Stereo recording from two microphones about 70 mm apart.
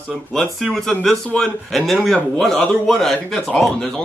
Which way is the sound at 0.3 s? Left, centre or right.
Centre.